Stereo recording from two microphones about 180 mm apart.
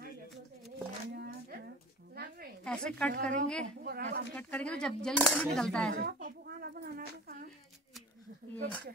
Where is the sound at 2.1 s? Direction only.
60° right (ahead or behind).